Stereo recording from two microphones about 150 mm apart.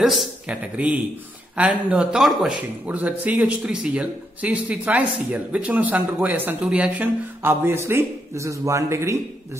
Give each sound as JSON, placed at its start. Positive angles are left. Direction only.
{"t": 0.0, "sound": "speech", "side_deg": 0}